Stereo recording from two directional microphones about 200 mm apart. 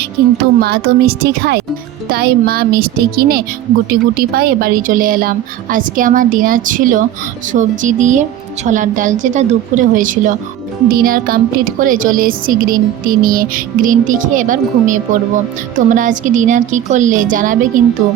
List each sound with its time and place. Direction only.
0.2 s a woman's voice: 55° right (ahead or behind)